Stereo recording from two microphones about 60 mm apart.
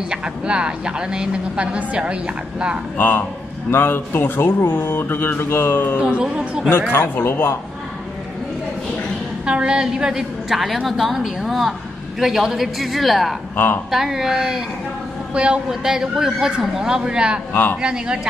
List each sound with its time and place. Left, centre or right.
0.1 s speech: centre
3.0 s speech: left
6.0 s speech: centre
6.9 s speech: left
9.5 s a man's voice: centre
15.3 s speech: centre
17.5 s speech: left
17.8 s speech: centre